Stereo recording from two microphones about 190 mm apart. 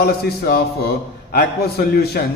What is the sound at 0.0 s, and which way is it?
Speech, 55° left (ahead or behind).